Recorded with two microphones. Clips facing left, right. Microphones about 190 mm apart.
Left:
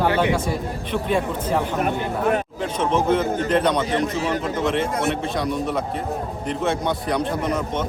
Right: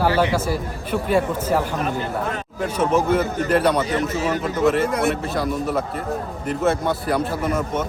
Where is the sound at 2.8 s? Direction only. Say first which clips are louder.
Right 1 dB; 10° right (ahead or behind).